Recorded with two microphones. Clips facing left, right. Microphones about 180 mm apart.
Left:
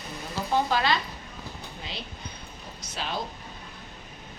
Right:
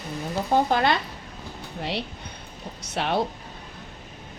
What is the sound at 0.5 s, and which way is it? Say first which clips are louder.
Speech: right 4 dB; 55° right (ahead or behind).